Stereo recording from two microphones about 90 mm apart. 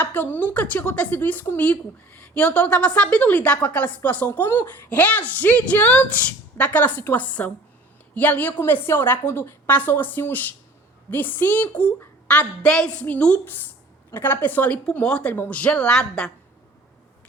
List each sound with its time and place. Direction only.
0.0 s a woman's voice: 20° left (ahead or behind)